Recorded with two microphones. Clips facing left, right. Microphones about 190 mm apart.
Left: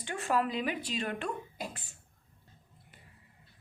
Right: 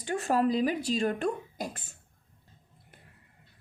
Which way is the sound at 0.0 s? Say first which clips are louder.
Right 4 dB; 40° right (ahead or behind).